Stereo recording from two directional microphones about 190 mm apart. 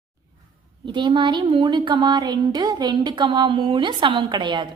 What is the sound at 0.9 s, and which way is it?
A woman's voice, 25° right (ahead or behind).